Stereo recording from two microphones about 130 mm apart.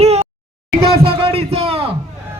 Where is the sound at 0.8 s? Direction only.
45° right (ahead or behind).